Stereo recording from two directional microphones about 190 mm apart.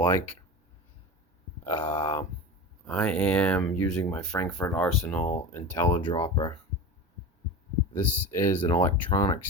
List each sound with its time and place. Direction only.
1.6 s speech: 10° left (ahead or behind)
7.9 s speech: 10° left (ahead or behind)